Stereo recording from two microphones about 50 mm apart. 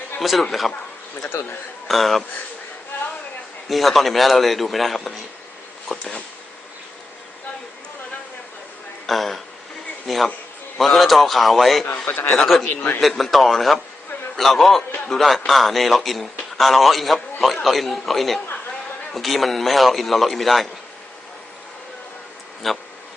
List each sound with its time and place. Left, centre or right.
0.2 s speech: centre
1.9 s a man's voice: centre
3.7 s a man's voice: centre
5.9 s speech: left
9.0 s a man's voice: centre
12.0 s a man's voice: left
12.4 s a man's voice: centre
12.7 s a man's voice: left
13.0 s a man's voice: centre
22.6 s a man's voice: centre